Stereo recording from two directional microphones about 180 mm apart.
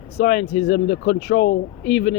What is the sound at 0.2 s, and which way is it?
Speech, 60° left (ahead or behind).